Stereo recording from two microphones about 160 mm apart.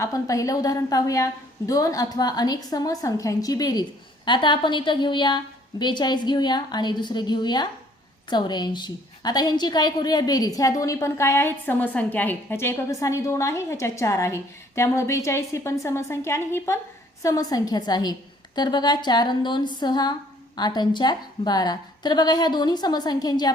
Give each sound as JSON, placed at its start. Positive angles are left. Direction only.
{"t": 0.0, "sound": "a woman's voice", "side_deg": 20}